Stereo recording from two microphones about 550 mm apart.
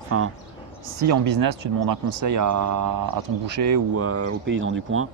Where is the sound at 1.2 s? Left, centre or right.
Right.